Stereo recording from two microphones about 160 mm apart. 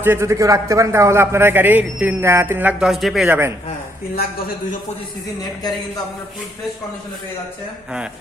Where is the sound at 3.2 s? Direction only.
10° right (ahead or behind).